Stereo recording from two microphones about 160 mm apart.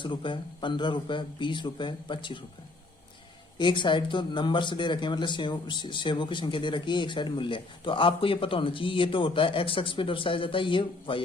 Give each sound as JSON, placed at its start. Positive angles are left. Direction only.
{"t": 0.0, "sound": "speech", "side_deg": 30}
{"t": 3.6, "sound": "speech", "side_deg": 30}